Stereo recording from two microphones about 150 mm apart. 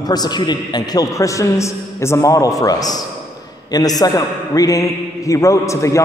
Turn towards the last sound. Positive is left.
turn(degrees=20)  # may be behind; listen again after turning